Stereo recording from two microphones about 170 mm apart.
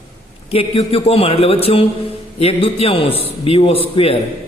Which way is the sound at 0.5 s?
35° left (ahead or behind).